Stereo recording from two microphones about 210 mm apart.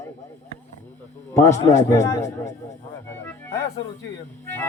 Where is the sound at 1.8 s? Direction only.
15° left (ahead or behind).